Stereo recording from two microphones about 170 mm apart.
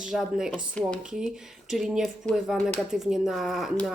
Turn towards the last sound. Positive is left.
turn(degrees=0)  # may be behind; listen again after turning